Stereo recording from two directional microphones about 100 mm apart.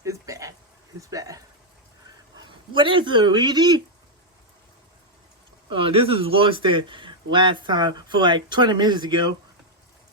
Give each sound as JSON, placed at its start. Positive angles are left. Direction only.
{"t": 0.0, "sound": "a sound", "side_deg": -35}
{"t": 2.3, "sound": "speech", "side_deg": -50}
{"t": 5.6, "sound": "a man's voice", "side_deg": -60}